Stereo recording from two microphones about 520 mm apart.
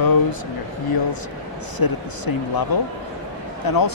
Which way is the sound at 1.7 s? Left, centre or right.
Left.